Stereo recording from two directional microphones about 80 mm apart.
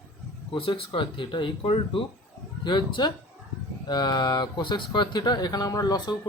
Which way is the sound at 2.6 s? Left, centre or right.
Left.